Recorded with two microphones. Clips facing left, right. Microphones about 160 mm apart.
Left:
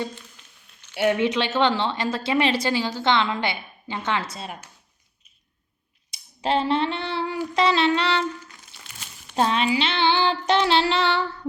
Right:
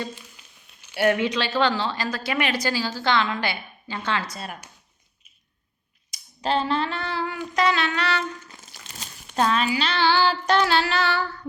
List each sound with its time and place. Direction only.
0.9 s a woman's voice: 25° left (ahead or behind)
6.1 s a sound: 30° left (ahead or behind)
9.3 s a woman's voice: 25° left (ahead or behind)